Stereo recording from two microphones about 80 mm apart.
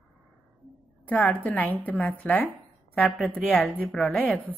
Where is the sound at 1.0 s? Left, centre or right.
Centre.